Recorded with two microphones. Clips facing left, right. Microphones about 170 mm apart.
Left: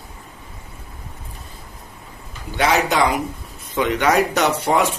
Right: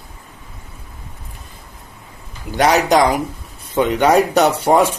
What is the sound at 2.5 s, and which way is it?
A man's voice, 40° right (ahead or behind).